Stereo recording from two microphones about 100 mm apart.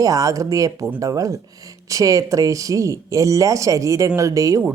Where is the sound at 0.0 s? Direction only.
35° right (ahead or behind).